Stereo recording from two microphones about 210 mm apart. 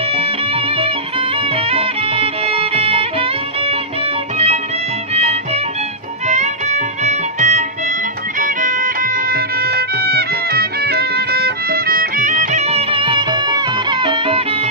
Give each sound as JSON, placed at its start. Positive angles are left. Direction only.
{"t": 0.1, "sound": "music", "side_deg": -25}
{"t": 5.1, "sound": "music", "side_deg": -30}